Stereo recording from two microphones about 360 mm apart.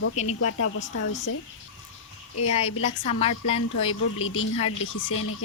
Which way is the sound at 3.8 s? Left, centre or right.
Left.